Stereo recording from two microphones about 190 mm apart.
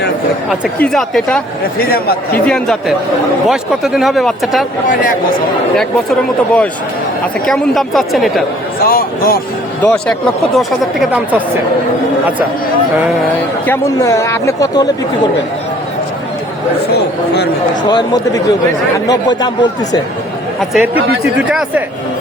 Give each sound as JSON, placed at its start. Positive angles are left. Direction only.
{"t": 0.8, "sound": "speech", "side_deg": 5}
{"t": 2.5, "sound": "speech", "side_deg": 0}
{"t": 5.7, "sound": "speech", "side_deg": 0}
{"t": 8.9, "sound": "speech", "side_deg": 50}
{"t": 9.8, "sound": "speech", "side_deg": 5}
{"t": 13.7, "sound": "speech", "side_deg": 15}
{"t": 16.9, "sound": "speech", "side_deg": 60}
{"t": 17.8, "sound": "speech", "side_deg": 20}
{"t": 20.6, "sound": "speech", "side_deg": -5}